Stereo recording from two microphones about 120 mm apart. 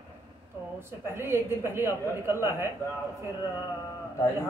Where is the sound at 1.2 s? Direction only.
20° right (ahead or behind).